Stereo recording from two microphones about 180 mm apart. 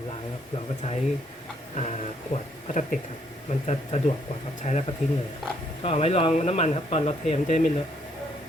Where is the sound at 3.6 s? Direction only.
35° left (ahead or behind).